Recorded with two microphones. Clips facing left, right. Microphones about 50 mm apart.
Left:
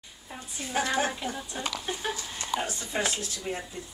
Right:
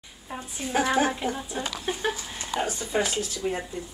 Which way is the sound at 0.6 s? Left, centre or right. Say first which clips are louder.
Right 4 dB; centre.